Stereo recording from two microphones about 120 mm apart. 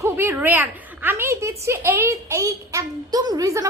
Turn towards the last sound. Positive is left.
turn(degrees=-25)  # may be behind; listen again after turning